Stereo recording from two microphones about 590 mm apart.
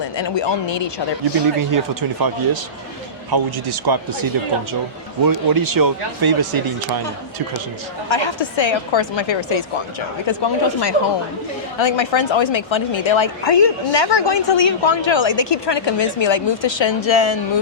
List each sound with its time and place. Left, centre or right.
0.2 s a woman's voice: left
1.5 s speech: right
8.1 s a woman's voice: left